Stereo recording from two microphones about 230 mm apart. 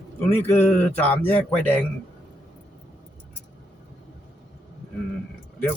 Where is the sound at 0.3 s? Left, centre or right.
Centre.